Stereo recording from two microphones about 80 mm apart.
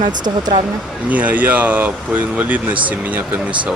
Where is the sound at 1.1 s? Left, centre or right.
Centre.